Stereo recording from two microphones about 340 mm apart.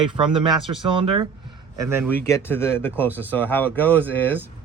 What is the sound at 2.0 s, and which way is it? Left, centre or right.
A man's voice, centre.